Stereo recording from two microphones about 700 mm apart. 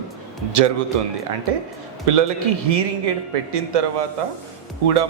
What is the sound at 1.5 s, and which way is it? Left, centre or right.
A man's voice, right.